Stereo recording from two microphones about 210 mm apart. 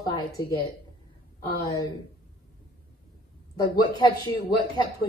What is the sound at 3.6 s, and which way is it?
Speech, 20° left (ahead or behind).